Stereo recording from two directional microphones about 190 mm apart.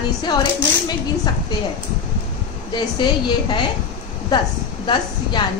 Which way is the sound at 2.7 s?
25° left (ahead or behind).